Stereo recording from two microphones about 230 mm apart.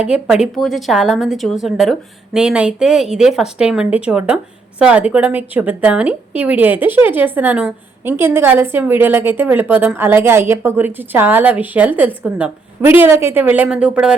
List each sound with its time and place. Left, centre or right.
0.0 s a woman's voice: centre